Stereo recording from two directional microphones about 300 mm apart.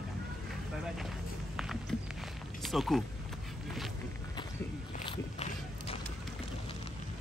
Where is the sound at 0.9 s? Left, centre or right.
Centre.